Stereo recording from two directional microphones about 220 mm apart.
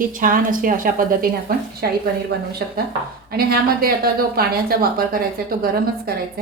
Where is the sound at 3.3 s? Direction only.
45° right (ahead or behind).